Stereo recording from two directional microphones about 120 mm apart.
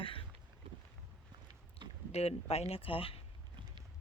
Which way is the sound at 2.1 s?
60° left (ahead or behind).